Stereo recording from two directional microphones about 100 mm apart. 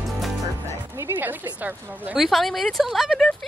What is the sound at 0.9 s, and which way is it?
Speech, 20° right (ahead or behind).